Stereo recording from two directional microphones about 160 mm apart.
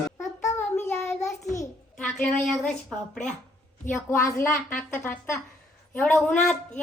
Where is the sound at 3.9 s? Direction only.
15° left (ahead or behind).